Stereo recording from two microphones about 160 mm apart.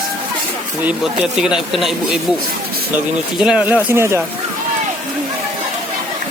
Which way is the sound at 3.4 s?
5° right (ahead or behind).